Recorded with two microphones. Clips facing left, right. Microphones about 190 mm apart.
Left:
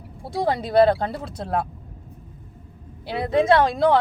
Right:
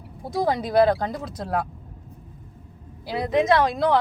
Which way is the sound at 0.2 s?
30° left (ahead or behind).